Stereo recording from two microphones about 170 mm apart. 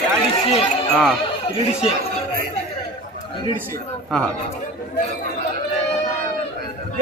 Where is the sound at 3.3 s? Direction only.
25° left (ahead or behind).